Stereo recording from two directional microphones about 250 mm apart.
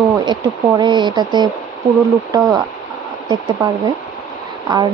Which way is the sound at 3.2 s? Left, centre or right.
Centre.